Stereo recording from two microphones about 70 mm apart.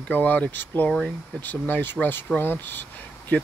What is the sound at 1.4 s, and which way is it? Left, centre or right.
Speech, left.